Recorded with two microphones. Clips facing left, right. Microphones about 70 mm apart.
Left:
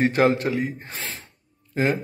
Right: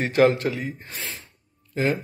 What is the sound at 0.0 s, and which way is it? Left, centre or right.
A man's voice, left.